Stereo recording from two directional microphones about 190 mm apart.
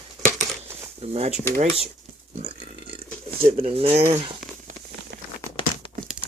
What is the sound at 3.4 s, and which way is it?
Speech, 45° right (ahead or behind).